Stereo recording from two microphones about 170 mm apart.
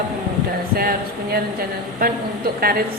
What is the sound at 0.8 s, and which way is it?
Speech, 60° right (ahead or behind).